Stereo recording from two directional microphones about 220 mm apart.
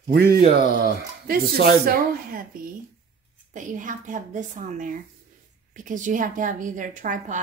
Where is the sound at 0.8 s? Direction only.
40° right (ahead or behind).